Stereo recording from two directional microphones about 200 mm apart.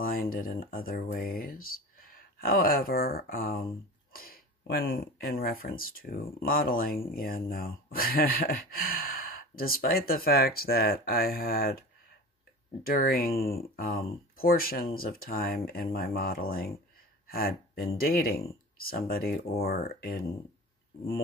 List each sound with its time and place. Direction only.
0.0 s speech: 50° left (ahead or behind)
12.8 s speech: 45° left (ahead or behind)